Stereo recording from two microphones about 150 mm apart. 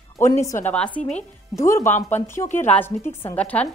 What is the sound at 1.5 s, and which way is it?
A woman's voice, 20° left (ahead or behind).